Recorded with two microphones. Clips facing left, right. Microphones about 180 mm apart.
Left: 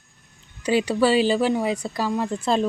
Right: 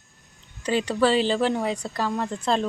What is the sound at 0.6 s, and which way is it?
Speech, 10° left (ahead or behind).